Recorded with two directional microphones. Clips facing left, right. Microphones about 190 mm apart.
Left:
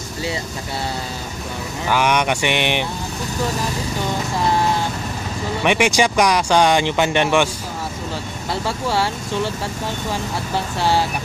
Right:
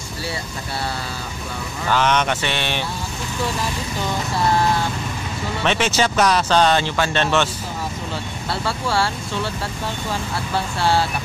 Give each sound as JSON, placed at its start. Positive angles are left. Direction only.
{"t": 1.9, "sound": "speech", "side_deg": 10}
{"t": 5.6, "sound": "speech", "side_deg": 15}
{"t": 8.5, "sound": "speech", "side_deg": 15}
{"t": 10.8, "sound": "speech", "side_deg": 15}